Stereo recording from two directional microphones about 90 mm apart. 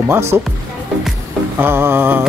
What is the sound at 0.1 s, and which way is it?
Speech, 30° right (ahead or behind).